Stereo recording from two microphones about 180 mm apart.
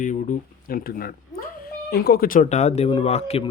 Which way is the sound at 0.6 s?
55° left (ahead or behind).